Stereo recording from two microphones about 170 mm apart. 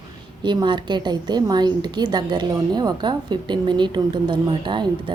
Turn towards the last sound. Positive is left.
turn(degrees=-25)  # may be behind; listen again after turning